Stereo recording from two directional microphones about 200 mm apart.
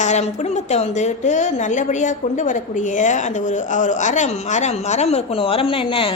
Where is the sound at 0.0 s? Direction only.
35° left (ahead or behind).